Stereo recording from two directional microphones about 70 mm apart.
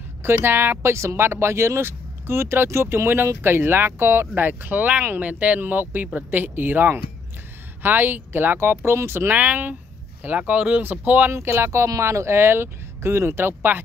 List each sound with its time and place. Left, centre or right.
0.2 s speech: right
9.3 s speech: right
11.3 s speech: right